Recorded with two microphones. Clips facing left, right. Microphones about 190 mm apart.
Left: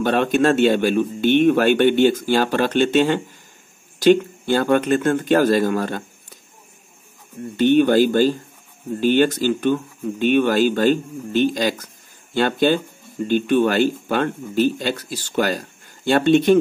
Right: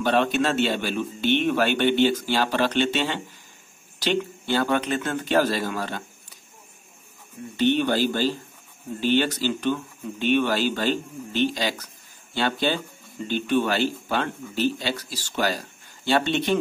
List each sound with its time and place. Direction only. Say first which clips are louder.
0.0 s speech: left 5 dB; 50° left (ahead or behind)
7.5 s speech: left 7 dB; 50° left (ahead or behind)